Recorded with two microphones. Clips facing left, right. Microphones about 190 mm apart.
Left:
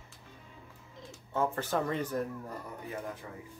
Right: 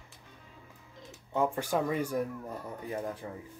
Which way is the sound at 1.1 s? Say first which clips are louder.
Right 2 dB; 15° right (ahead or behind).